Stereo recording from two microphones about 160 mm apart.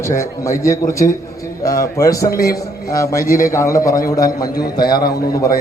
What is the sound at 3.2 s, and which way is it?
Speech, 65° left (ahead or behind).